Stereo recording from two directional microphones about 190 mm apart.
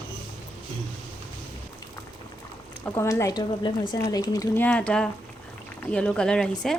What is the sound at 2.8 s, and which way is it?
A woman's voice, 15° left (ahead or behind).